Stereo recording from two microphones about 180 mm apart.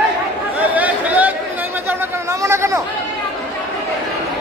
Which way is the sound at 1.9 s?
15° right (ahead or behind).